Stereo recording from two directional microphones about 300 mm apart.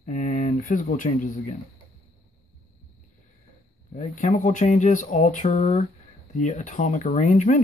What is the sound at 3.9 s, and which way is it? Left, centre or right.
Speech, left.